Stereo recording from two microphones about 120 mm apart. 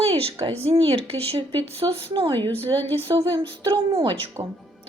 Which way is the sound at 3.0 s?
40° right (ahead or behind).